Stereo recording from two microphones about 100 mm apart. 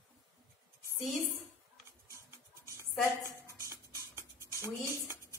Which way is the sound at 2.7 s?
30° right (ahead or behind).